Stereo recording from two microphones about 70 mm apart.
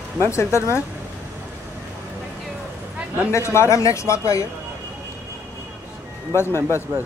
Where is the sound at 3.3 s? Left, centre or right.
Left.